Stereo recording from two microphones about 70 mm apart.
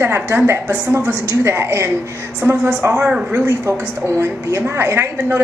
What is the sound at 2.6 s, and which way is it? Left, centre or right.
Speech, right.